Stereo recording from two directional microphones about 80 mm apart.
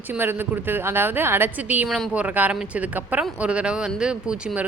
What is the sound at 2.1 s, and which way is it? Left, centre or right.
Speech, centre.